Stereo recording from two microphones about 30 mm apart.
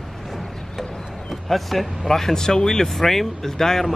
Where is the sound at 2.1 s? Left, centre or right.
Centre.